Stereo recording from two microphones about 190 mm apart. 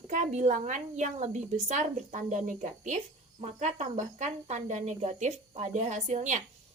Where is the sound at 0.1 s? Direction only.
40° right (ahead or behind).